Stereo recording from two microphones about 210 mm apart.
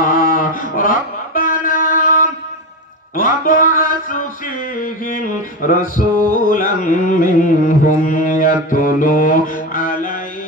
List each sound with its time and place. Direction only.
0.0 s music: 40° left (ahead or behind)
5.0 s a sound: 40° left (ahead or behind)
6.3 s mantra: 40° left (ahead or behind)